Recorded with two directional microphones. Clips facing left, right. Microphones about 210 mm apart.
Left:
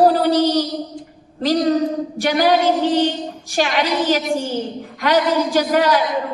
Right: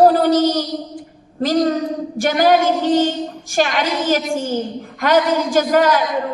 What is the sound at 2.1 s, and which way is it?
Speech, 45° right (ahead or behind).